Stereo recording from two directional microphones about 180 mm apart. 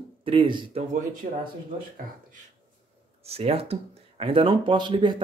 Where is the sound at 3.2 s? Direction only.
35° right (ahead or behind).